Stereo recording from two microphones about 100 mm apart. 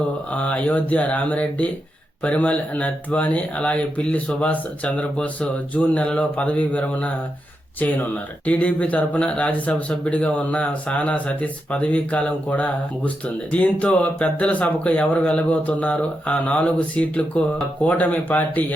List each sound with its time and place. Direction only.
0.3 s speech: 15° left (ahead or behind)